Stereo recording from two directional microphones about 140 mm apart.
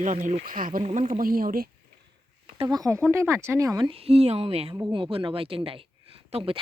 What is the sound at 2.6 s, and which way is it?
Speech, 45° right (ahead or behind).